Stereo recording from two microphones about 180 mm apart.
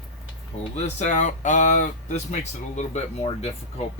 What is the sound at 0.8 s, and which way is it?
Speech, 40° left (ahead or behind).